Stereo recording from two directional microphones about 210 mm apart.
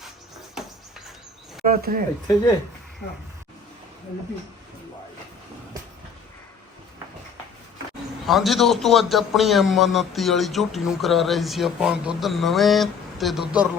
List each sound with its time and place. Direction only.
0.6 s bird: centre (ahead or behind)
1.6 s speech: 40° right (ahead or behind)
8.3 s a man's voice: centre (ahead or behind)